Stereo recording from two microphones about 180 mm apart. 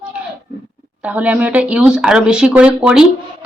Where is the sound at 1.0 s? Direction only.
10° right (ahead or behind).